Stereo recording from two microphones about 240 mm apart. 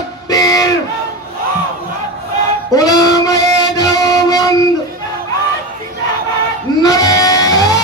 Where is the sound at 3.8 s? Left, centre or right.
Centre.